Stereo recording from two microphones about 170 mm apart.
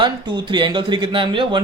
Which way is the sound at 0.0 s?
25° right (ahead or behind).